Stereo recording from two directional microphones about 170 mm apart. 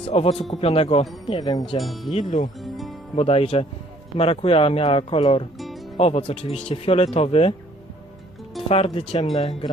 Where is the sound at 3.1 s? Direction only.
35° left (ahead or behind).